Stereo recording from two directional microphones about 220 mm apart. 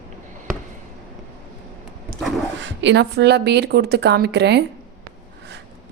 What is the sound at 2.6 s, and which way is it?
A woman's voice, 55° right (ahead or behind).